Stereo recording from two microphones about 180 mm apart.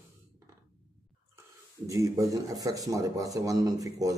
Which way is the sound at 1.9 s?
20° right (ahead or behind).